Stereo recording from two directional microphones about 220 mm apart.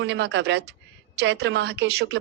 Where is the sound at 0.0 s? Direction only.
55° right (ahead or behind).